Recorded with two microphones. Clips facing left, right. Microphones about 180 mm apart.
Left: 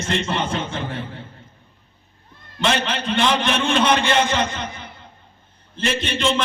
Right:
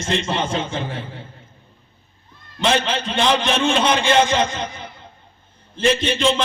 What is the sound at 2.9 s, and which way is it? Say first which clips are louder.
A man's voice: right 1 dB; 60° left (ahead or behind).